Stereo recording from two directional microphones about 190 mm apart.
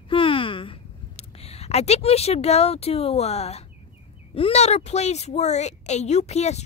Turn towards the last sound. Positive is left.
turn(degrees=35)  # may be behind; listen again after turning